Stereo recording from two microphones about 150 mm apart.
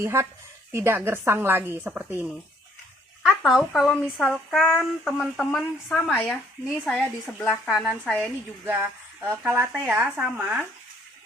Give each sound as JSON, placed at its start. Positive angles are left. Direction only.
{"t": 0.0, "sound": "a woman's voice", "side_deg": -20}
{"t": 3.2, "sound": "a woman's voice", "side_deg": 0}
{"t": 8.6, "sound": "a woman's voice", "side_deg": -15}